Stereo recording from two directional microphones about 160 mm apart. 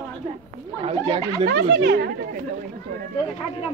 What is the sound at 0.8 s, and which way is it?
Speech, 35° right (ahead or behind).